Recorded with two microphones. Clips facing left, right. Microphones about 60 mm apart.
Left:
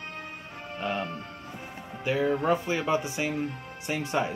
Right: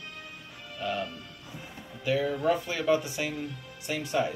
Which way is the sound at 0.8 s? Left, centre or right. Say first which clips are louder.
Left 1 dB; left.